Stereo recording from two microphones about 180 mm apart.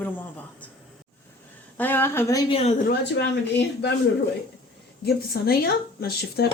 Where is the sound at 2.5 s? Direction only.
35° left (ahead or behind).